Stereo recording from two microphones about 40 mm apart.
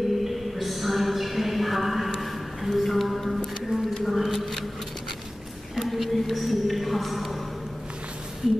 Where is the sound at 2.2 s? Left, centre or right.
Centre.